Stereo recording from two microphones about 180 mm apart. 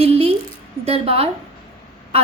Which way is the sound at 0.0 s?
35° right (ahead or behind).